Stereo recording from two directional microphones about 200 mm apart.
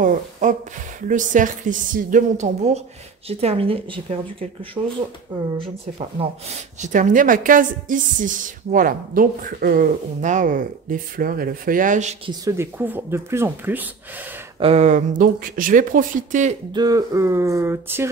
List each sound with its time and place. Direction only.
0.0 s a sound: 40° right (ahead or behind)
1.0 s a woman's voice: 40° right (ahead or behind)
6.8 s a woman's voice: 40° right (ahead or behind)
12.3 s speech: 15° right (ahead or behind)
14.6 s a woman's voice: 30° right (ahead or behind)
16.7 s speech: 20° right (ahead or behind)